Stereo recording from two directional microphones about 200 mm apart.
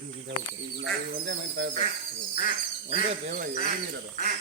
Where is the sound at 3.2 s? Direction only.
40° right (ahead or behind).